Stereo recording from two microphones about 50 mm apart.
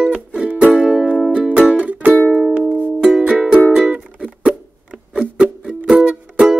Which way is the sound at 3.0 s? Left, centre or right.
Centre.